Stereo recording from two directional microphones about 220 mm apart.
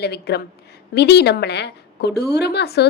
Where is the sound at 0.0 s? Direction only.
50° left (ahead or behind).